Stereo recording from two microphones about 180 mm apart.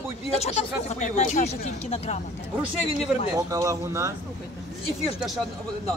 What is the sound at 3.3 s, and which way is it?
Speech, 20° right (ahead or behind).